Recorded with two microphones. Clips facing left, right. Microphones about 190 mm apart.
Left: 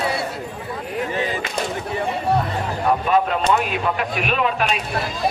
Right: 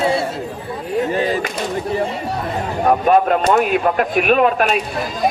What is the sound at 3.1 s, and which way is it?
A man's voice, 45° right (ahead or behind).